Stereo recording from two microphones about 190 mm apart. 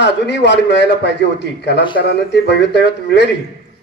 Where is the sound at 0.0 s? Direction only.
65° left (ahead or behind).